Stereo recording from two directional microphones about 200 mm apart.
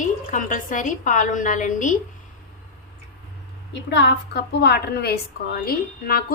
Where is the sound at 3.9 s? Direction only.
60° left (ahead or behind).